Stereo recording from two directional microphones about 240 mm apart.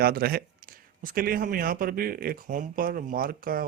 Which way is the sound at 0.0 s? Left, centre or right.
Right.